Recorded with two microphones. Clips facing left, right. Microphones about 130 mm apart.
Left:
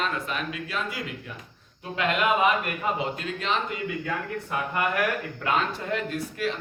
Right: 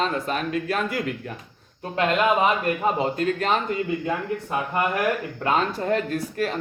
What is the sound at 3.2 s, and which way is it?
Speech, 45° right (ahead or behind).